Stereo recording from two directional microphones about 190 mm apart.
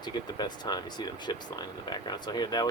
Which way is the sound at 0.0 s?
20° left (ahead or behind).